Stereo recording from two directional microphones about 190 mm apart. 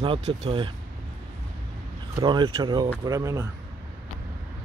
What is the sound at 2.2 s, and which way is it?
Speech, 25° right (ahead or behind).